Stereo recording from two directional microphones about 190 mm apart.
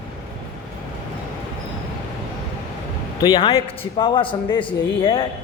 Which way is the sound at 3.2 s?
25° left (ahead or behind).